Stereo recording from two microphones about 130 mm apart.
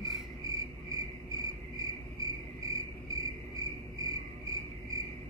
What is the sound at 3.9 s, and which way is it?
Music, 30° right (ahead or behind).